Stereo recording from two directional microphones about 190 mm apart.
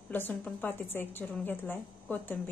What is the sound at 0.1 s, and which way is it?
A woman's voice, 10° left (ahead or behind).